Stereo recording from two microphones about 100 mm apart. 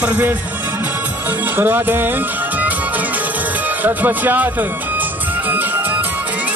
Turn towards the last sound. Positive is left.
turn(degrees=-20)  # may be behind; listen again after turning